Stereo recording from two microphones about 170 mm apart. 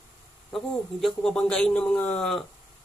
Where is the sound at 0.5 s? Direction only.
Centre (ahead or behind).